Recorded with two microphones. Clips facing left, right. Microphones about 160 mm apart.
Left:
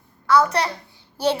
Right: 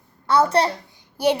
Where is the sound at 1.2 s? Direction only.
10° right (ahead or behind).